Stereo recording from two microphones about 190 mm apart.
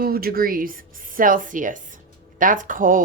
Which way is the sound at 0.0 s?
50° right (ahead or behind).